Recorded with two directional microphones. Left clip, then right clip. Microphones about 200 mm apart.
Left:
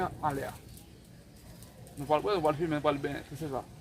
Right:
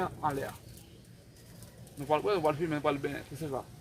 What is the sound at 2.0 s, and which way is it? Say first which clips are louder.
Speech: left 1 dB; 5° right (ahead or behind).